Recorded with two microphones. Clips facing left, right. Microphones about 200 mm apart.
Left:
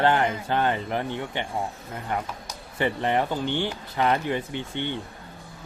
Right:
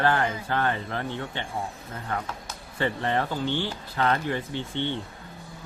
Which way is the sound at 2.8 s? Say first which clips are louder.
Left 2 dB; 15° left (ahead or behind).